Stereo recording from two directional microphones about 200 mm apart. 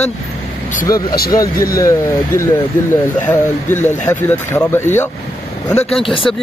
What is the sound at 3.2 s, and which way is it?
Speech, 10° left (ahead or behind).